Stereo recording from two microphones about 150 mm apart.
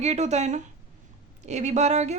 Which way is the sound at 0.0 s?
50° right (ahead or behind).